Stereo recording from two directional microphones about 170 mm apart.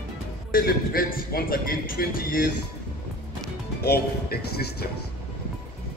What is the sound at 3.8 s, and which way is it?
Speech, 70° left (ahead or behind).